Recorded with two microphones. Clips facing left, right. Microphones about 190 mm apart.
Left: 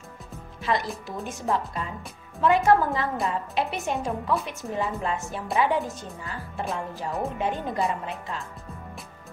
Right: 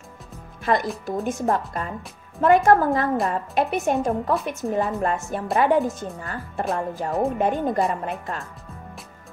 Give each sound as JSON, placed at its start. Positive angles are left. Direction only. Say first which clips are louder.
{"t": 0.7, "sound": "a woman's voice", "louder": "right 5 dB", "side_deg": -50}